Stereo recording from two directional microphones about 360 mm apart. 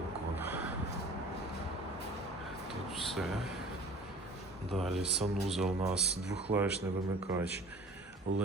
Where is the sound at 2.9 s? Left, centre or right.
Centre.